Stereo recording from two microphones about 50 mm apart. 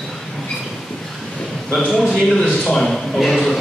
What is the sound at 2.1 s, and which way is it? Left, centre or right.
A man's voice, centre.